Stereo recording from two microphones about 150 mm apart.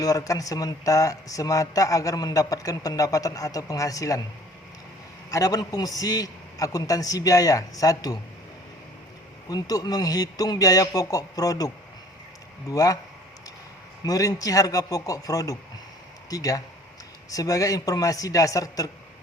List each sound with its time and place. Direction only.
0.0 s speech: 25° left (ahead or behind)
5.3 s speech: 20° left (ahead or behind)
9.5 s speech: 25° left (ahead or behind)
14.0 s speech: 25° left (ahead or behind)